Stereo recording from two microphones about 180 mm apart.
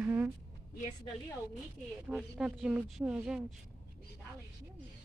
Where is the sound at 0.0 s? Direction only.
10° right (ahead or behind).